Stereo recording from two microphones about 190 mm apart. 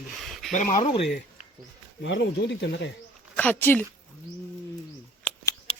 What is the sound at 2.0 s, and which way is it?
Speech, 75° left (ahead or behind).